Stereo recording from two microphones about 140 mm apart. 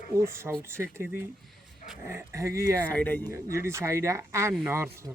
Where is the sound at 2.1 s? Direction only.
20° right (ahead or behind).